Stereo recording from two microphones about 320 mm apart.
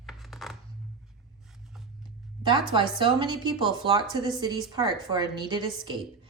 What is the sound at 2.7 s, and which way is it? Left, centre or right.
A woman's voice, centre.